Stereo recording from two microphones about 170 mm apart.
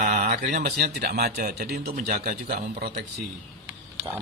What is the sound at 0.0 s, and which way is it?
A man's voice, 45° right (ahead or behind).